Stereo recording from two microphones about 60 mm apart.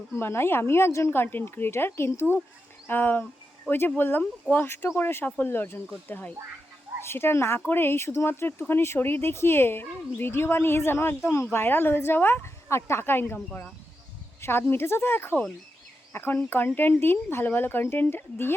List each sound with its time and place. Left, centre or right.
0.1 s speech: left
6.1 s speech: left
7.0 s a woman's voice: left